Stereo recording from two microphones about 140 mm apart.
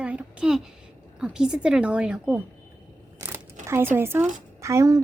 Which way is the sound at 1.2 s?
5° right (ahead or behind).